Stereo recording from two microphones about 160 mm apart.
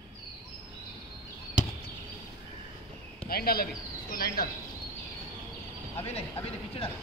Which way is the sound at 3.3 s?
70° left (ahead or behind).